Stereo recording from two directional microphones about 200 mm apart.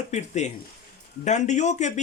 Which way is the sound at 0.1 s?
35° left (ahead or behind).